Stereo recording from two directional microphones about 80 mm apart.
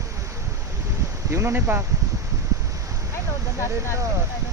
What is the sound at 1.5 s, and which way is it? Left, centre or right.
Speech, right.